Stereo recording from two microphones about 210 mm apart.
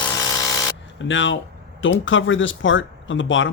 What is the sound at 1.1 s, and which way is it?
Speech, 60° left (ahead or behind).